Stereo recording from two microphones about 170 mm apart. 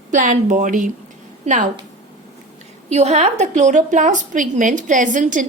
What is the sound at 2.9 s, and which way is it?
A woman's voice, 40° right (ahead or behind).